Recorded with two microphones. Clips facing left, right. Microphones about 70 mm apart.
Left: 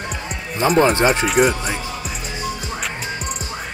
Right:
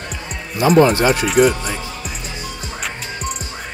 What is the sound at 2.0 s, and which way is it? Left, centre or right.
Music, centre.